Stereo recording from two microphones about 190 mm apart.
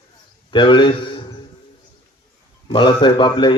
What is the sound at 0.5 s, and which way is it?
Speech, 25° left (ahead or behind).